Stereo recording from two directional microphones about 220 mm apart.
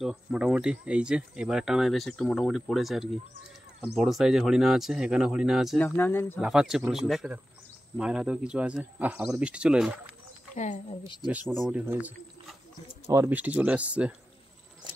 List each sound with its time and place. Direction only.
0.0 s speech: 5° right (ahead or behind)
5.9 s speech: 10° left (ahead or behind)
6.4 s speech: centre (ahead or behind)
10.5 s speech: 35° left (ahead or behind)
11.2 s speech: 5° right (ahead or behind)